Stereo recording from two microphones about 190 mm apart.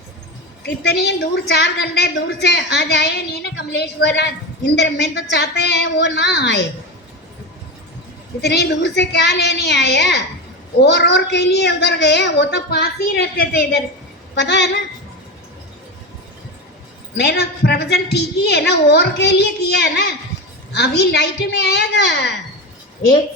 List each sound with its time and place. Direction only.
0.6 s a woman's voice: 65° left (ahead or behind)
8.4 s a woman's voice: 60° left (ahead or behind)
14.3 s a woman's voice: 65° left (ahead or behind)
17.2 s a woman's voice: 65° left (ahead or behind)